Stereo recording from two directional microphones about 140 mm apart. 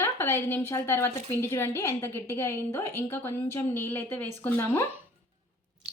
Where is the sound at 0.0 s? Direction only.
20° left (ahead or behind).